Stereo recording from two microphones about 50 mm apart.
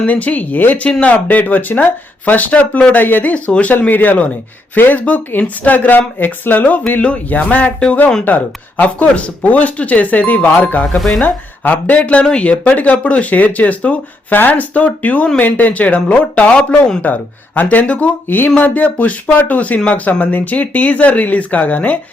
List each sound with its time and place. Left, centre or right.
0.0 s speech: left
0.9 s speech: left
10.9 s speech: centre
11.2 s speech: left
17.0 s speech: left
18.3 s speech: left